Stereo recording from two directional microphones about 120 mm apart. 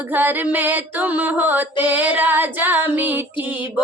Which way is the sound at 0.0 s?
15° right (ahead or behind).